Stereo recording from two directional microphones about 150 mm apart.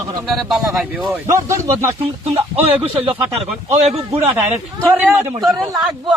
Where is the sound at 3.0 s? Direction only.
40° right (ahead or behind).